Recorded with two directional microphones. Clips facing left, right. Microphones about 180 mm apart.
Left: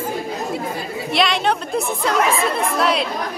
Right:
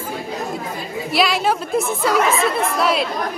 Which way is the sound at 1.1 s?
5° right (ahead or behind).